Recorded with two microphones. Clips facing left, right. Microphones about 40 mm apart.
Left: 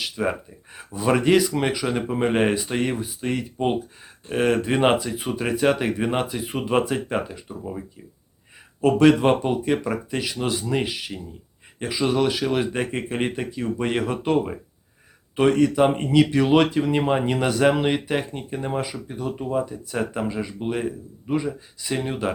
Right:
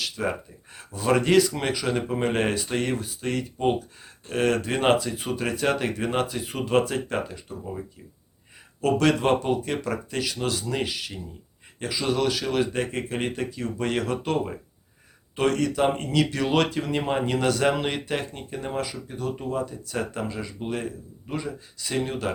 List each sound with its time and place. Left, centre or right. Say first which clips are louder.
0.0 s speech: left 3 dB; centre
8.8 s speech: left 5 dB; centre